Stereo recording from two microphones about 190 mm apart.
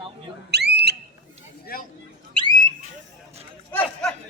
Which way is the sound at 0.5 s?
60° right (ahead or behind).